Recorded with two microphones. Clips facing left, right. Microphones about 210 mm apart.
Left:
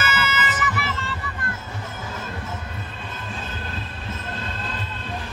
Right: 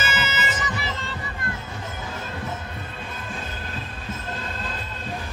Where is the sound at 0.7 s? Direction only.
20° right (ahead or behind).